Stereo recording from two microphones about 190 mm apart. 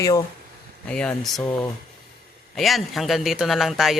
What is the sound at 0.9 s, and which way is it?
Speech, 5° left (ahead or behind).